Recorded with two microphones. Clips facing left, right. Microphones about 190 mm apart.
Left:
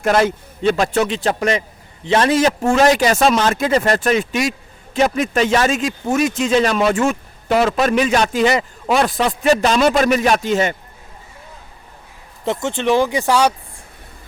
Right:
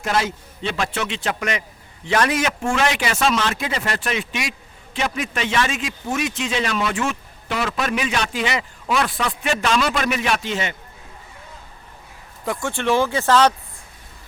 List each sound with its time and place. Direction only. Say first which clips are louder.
0.0 s a man's voice: left 7 dB; 55° left (ahead or behind)
12.5 s speech: left 4 dB; 20° left (ahead or behind)